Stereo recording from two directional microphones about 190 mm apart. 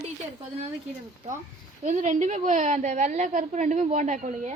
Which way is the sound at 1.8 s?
40° right (ahead or behind).